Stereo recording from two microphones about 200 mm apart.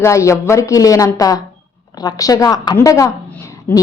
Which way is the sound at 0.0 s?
15° left (ahead or behind).